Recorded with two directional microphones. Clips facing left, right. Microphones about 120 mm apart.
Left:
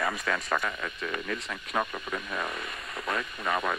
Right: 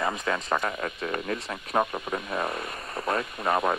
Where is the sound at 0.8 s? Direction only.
35° right (ahead or behind).